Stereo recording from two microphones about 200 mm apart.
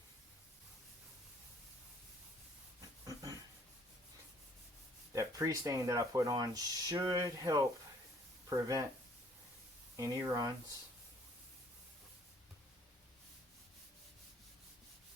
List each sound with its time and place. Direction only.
3.1 s a sound: 15° right (ahead or behind)
5.1 s speech: 15° right (ahead or behind)
10.0 s speech: 20° right (ahead or behind)